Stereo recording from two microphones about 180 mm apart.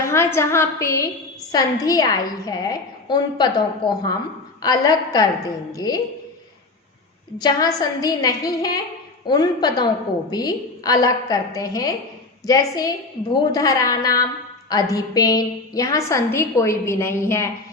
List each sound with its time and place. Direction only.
0.0 s a woman's voice: 15° left (ahead or behind)
7.3 s a woman's voice: 20° left (ahead or behind)